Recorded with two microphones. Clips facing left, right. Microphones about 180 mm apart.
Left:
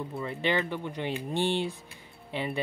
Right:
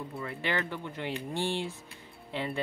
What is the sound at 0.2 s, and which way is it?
Speech, 20° left (ahead or behind).